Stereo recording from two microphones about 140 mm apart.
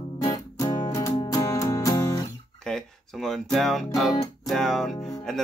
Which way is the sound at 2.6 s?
5° left (ahead or behind).